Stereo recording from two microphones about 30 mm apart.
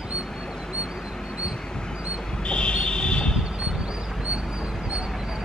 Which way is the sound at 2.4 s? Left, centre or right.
Left.